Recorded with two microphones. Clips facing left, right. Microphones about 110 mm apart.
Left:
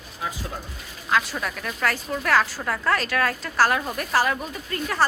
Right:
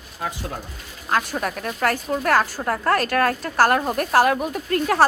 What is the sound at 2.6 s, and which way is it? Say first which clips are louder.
Speech: right 4 dB; 35° right (ahead or behind).